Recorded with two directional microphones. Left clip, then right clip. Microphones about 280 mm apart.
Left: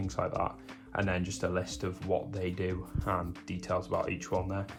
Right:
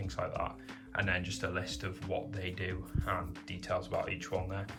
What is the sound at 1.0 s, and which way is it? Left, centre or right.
Speech, centre.